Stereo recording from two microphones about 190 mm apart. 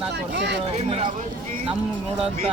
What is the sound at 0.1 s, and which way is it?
Speech, 65° right (ahead or behind).